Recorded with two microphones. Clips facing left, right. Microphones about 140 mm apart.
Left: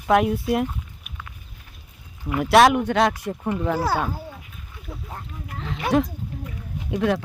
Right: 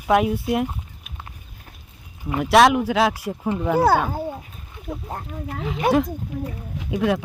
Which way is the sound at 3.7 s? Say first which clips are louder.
Right 6 dB; 55° right (ahead or behind).